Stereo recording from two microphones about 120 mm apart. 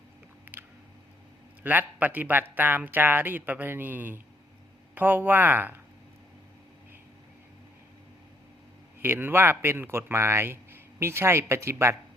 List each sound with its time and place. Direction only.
0.5 s a sound: 15° right (ahead or behind)
1.6 s speech: 15° right (ahead or behind)
9.0 s speech: 15° right (ahead or behind)